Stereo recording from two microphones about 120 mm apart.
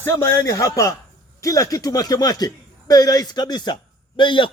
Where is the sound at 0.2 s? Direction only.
25° left (ahead or behind).